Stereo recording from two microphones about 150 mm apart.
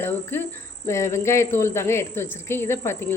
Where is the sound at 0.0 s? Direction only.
15° left (ahead or behind).